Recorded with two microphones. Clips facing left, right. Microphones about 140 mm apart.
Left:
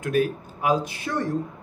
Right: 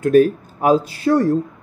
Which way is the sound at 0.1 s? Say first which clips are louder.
Right 9 dB; 40° right (ahead or behind).